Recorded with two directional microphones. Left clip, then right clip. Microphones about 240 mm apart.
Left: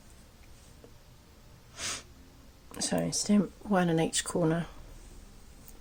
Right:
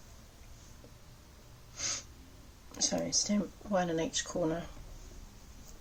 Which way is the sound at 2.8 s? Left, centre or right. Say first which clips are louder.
Left 1 dB; left.